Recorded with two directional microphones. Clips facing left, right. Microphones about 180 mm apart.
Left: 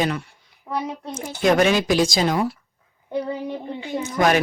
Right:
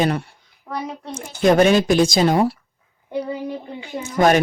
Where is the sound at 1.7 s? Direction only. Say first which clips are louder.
Right 3 dB; 50° right (ahead or behind).